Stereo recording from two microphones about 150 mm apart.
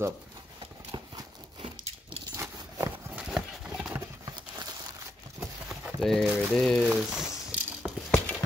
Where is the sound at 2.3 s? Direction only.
25° right (ahead or behind).